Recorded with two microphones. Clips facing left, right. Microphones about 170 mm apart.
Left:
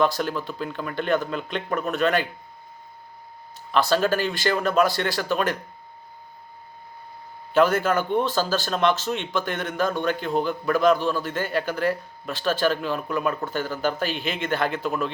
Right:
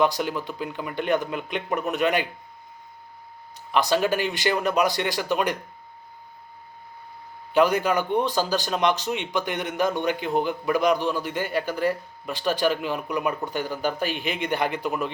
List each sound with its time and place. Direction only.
0.0 s speech: 15° right (ahead or behind)
3.7 s speech: 15° right (ahead or behind)
7.5 s speech: 15° right (ahead or behind)